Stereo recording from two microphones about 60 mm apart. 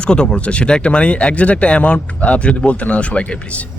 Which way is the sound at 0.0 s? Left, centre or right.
Centre.